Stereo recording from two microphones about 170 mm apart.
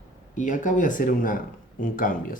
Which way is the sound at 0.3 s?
50° left (ahead or behind).